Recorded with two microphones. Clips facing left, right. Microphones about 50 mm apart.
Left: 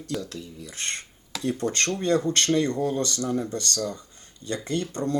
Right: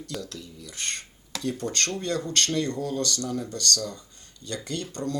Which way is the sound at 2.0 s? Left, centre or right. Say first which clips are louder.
Left 7 dB; left.